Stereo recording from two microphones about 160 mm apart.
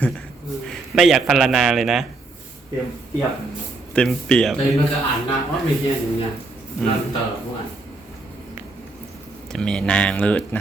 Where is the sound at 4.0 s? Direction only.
5° left (ahead or behind).